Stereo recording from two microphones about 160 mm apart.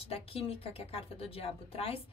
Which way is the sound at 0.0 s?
35° left (ahead or behind).